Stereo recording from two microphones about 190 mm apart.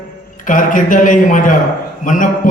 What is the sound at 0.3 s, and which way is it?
A man's voice, 45° left (ahead or behind).